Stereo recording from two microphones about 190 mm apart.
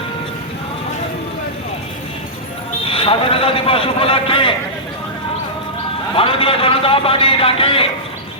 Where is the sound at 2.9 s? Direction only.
30° left (ahead or behind).